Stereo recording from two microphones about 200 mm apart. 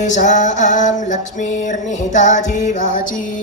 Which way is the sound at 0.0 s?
35° left (ahead or behind).